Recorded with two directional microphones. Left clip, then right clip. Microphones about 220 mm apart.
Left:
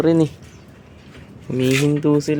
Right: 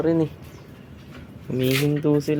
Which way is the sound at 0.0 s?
30° left (ahead or behind).